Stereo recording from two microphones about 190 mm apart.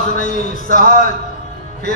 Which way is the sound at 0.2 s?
40° left (ahead or behind).